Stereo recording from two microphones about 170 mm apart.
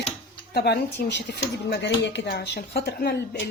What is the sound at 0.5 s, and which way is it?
Speech, 70° left (ahead or behind).